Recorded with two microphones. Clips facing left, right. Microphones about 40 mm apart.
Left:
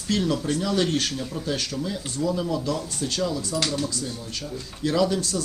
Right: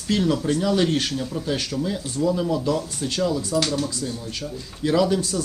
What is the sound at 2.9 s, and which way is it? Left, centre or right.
Speech, centre.